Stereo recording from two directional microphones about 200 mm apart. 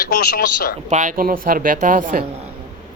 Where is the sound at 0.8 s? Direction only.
40° right (ahead or behind).